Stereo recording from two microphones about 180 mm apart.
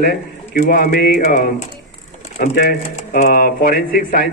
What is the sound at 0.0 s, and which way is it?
Speech, 50° left (ahead or behind).